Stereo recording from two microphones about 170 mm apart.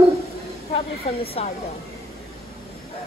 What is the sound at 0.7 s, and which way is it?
Speech, 35° left (ahead or behind).